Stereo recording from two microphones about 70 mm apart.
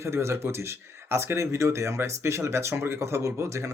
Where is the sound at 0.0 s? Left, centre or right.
Right.